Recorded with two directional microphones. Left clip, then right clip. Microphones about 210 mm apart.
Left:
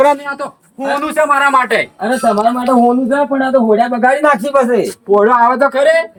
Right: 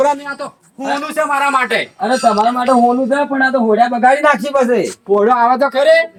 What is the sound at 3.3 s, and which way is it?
A man's voice, 15° right (ahead or behind).